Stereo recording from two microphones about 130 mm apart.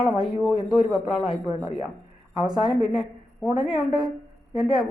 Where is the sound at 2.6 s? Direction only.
5° right (ahead or behind).